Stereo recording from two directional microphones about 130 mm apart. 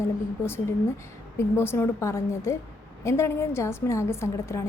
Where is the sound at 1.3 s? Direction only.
20° left (ahead or behind).